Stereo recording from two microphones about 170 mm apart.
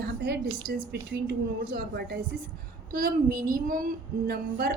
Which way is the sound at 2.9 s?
55° right (ahead or behind).